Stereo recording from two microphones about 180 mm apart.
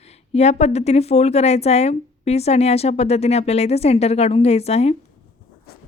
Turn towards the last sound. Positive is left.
turn(degrees=35)  # may be behind; listen again after turning